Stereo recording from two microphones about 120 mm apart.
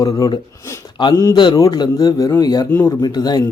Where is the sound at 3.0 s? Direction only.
35° left (ahead or behind).